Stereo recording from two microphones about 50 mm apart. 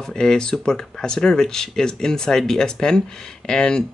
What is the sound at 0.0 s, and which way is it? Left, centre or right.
Speech, centre.